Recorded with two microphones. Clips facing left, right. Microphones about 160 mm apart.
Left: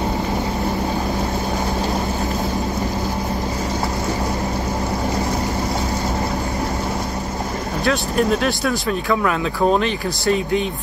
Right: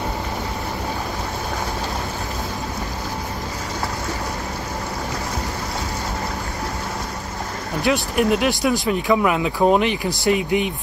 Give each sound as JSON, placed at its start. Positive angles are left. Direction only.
{"t": 7.8, "sound": "speech", "side_deg": -15}